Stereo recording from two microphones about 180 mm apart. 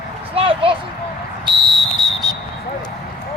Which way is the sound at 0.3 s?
30° right (ahead or behind).